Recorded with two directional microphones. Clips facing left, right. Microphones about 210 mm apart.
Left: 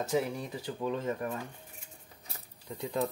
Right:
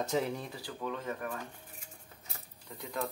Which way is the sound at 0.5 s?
20° left (ahead or behind).